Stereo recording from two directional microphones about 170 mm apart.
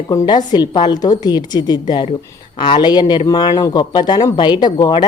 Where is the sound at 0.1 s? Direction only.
25° left (ahead or behind).